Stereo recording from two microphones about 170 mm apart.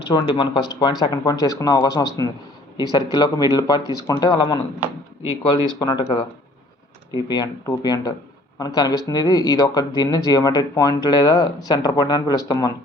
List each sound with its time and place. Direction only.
0.1 s speech: 25° left (ahead or behind)